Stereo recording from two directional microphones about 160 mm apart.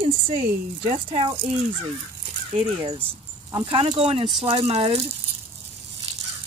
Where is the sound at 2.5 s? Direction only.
35° right (ahead or behind).